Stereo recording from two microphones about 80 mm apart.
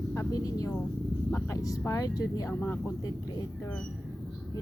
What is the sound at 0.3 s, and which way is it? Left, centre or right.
Speech, left.